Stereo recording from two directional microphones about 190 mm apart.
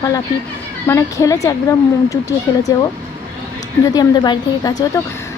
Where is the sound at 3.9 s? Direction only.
20° left (ahead or behind).